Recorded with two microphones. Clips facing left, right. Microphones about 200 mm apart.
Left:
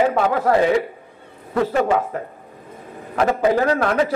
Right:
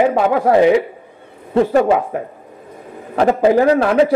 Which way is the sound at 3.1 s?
30° right (ahead or behind).